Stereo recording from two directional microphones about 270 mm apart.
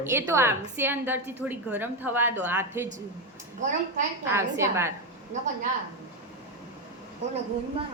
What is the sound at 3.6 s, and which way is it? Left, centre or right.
Speech, right.